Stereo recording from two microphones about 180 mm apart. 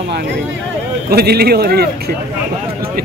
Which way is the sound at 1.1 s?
60° right (ahead or behind).